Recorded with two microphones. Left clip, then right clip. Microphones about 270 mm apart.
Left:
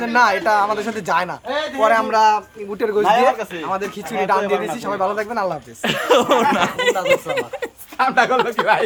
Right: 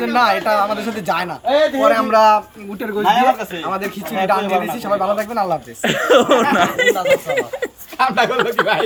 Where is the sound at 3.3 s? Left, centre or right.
Centre.